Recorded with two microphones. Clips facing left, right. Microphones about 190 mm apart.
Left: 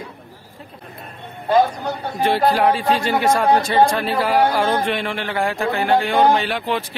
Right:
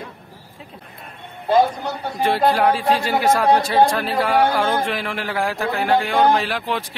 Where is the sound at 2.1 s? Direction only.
Centre (ahead or behind).